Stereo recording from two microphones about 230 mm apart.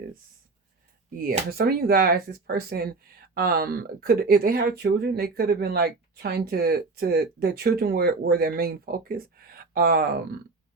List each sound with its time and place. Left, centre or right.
1.2 s speech: right